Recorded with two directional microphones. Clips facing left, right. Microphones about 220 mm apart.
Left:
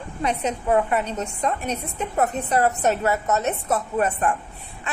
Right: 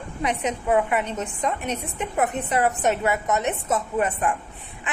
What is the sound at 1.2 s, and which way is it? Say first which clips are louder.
A woman's voice: left 1 dB; 15° right (ahead or behind).